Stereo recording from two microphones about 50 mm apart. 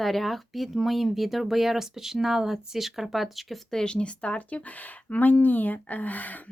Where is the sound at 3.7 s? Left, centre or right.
Centre; by 6.4 s left.